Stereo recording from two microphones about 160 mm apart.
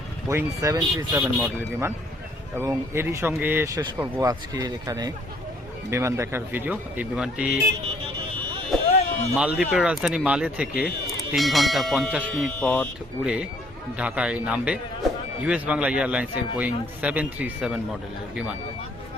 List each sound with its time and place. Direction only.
0.3 s speech: 20° right (ahead or behind)
1.2 s speech: 10° right (ahead or behind)
8.9 s a sound: 45° left (ahead or behind)
9.3 s speech: 10° right (ahead or behind)
12.5 s speech: 10° left (ahead or behind)
13.2 s speech: 5° right (ahead or behind)